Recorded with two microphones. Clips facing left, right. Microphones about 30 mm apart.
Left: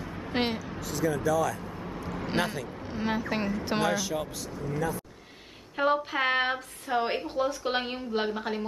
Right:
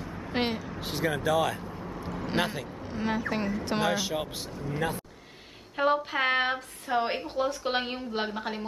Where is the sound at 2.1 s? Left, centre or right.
Centre.